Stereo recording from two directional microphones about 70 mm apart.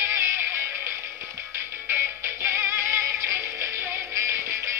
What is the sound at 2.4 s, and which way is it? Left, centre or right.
Music, right.